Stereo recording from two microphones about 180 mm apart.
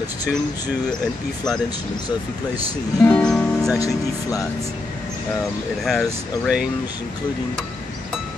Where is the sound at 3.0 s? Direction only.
5° left (ahead or behind).